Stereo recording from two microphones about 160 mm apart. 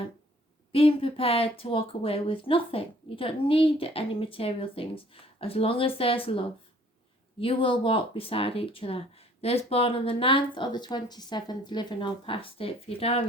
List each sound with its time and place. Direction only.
0.7 s speech: 35° left (ahead or behind)